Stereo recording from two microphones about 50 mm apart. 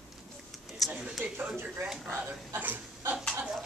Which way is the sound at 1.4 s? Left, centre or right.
Right.